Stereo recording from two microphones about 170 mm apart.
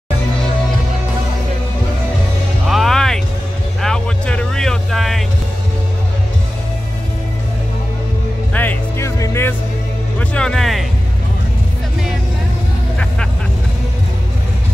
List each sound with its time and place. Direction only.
2.7 s music: centre (ahead or behind)
3.8 s vehicle: 5° left (ahead or behind)
8.5 s music: 15° left (ahead or behind)